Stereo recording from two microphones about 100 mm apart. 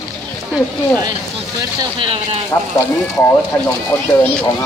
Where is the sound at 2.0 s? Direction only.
65° right (ahead or behind).